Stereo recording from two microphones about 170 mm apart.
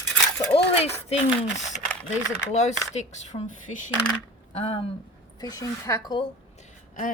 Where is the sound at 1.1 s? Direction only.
45° left (ahead or behind).